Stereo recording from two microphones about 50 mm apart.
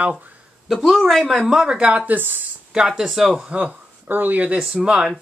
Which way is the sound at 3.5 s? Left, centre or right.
Right.